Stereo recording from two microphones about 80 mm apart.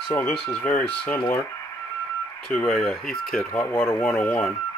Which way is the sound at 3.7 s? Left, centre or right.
Left.